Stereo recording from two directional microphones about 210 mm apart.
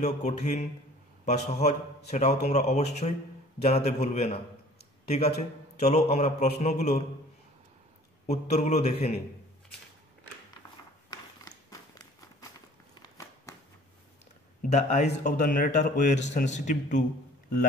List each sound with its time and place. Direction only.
0.0 s a man's voice: 35° left (ahead or behind)
8.3 s a man's voice: 30° left (ahead or behind)
11.1 s a sound: 20° left (ahead or behind)
14.6 s a man's voice: 40° left (ahead or behind)